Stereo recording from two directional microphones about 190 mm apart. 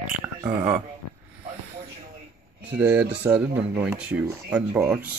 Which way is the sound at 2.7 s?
10° right (ahead or behind).